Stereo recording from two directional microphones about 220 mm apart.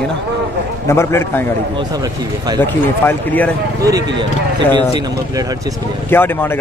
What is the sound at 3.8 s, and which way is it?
A man's voice, 15° right (ahead or behind).